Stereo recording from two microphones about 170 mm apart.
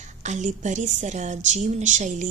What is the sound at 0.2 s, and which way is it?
Speech, 45° right (ahead or behind).